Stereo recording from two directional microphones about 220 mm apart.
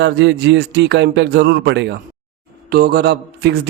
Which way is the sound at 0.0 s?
50° right (ahead or behind).